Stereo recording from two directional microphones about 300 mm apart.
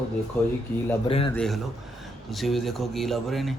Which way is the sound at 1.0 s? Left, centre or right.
Centre.